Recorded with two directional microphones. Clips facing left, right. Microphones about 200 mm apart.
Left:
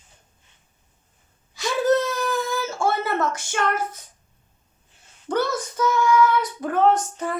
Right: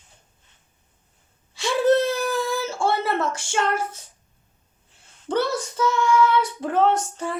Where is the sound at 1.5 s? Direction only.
30° right (ahead or behind).